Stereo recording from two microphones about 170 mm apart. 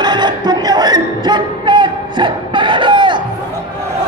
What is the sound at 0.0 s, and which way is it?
Music, 25° right (ahead or behind).